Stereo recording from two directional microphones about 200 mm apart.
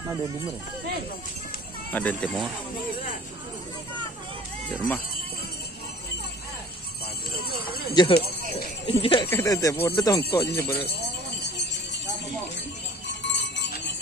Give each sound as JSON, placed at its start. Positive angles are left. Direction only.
{"t": 1.9, "sound": "speech", "side_deg": 10}
{"t": 4.6, "sound": "speech", "side_deg": 10}
{"t": 7.9, "sound": "speech", "side_deg": 20}
{"t": 13.3, "sound": "a sound", "side_deg": 60}